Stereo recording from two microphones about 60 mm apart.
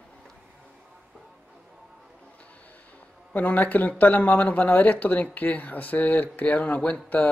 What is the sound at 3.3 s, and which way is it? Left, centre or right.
Speech, left.